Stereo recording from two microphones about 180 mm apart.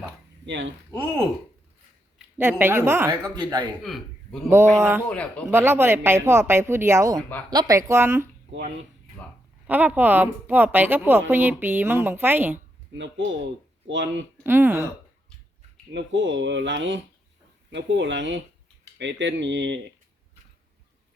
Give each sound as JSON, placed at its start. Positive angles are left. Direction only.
{"t": 0.4, "sound": "speech", "side_deg": -80}
{"t": 0.9, "sound": "a man's voice", "side_deg": -20}
{"t": 3.3, "sound": "a man's voice", "side_deg": -25}
{"t": 3.8, "sound": "a man's voice", "side_deg": 0}
{"t": 4.8, "sound": "speech", "side_deg": -15}
{"t": 5.0, "sound": "speech", "side_deg": 5}
{"t": 5.5, "sound": "speech", "side_deg": -10}
{"t": 9.6, "sound": "speech", "side_deg": -10}
{"t": 13.0, "sound": "speech", "side_deg": -90}
{"t": 14.4, "sound": "speech", "side_deg": -10}
{"t": 15.9, "sound": "speech", "side_deg": -80}